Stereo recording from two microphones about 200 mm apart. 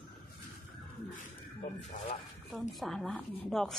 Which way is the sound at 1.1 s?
40° left (ahead or behind).